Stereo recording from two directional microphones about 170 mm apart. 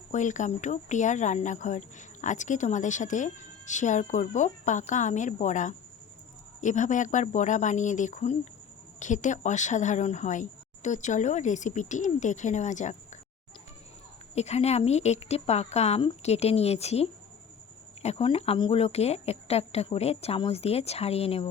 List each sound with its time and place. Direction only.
0.1 s speech: 45° left (ahead or behind)
14.3 s speech: 40° left (ahead or behind)